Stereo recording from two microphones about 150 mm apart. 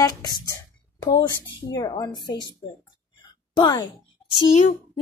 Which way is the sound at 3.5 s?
25° left (ahead or behind).